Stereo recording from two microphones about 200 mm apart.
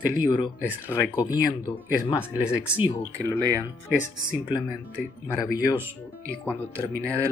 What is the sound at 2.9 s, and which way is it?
Speech, 10° left (ahead or behind).